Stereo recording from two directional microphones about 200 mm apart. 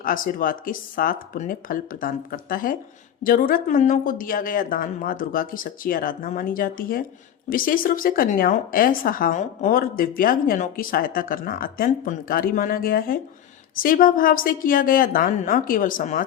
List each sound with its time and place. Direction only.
0.0 s a woman's voice: 45° left (ahead or behind)